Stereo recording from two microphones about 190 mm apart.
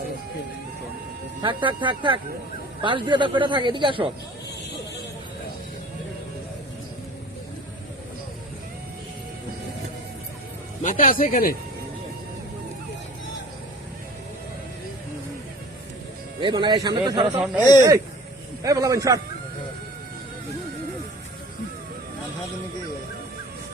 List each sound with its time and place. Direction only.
1.4 s speech: 25° right (ahead or behind)
10.8 s speech: 45° left (ahead or behind)
16.4 s speech: 25° right (ahead or behind)
17.6 s speech: 20° left (ahead or behind)
18.6 s a man's voice: 20° right (ahead or behind)